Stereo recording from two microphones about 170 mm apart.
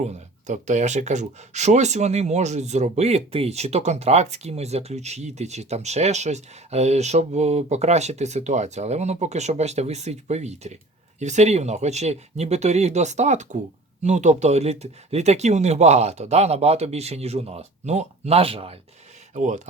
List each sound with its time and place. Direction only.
0.0 s speech: 45° right (ahead or behind)
19.3 s speech: 45° right (ahead or behind)